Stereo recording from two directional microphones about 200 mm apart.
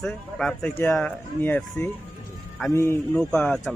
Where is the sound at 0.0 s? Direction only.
Centre (ahead or behind).